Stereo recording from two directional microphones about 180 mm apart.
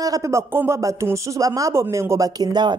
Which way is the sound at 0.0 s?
20° right (ahead or behind).